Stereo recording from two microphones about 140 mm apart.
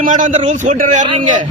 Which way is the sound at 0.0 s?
65° right (ahead or behind).